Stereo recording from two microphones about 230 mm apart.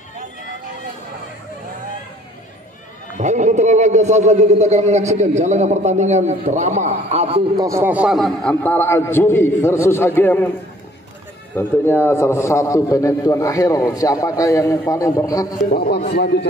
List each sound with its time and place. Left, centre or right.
3.2 s speech: right; by 10.5 s centre
11.5 s a man's voice: centre
15.7 s a man's voice: left